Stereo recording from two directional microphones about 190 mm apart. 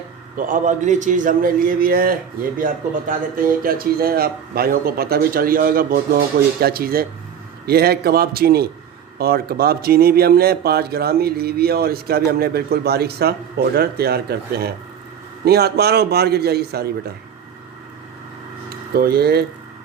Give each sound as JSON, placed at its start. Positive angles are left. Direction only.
{"t": 0.3, "sound": "a man's voice", "side_deg": -45}
{"t": 18.9, "sound": "speech", "side_deg": -55}